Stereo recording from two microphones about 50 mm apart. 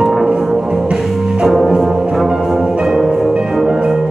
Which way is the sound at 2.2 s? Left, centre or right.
Centre.